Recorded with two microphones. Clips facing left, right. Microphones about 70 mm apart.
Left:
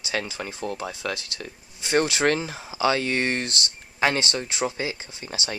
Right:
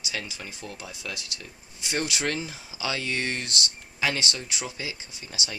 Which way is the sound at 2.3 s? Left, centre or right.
Left.